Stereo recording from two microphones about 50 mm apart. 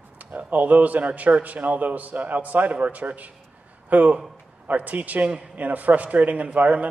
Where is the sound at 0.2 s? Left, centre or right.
Right.